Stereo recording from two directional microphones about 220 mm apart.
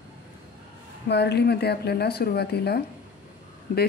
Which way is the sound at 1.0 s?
50° left (ahead or behind).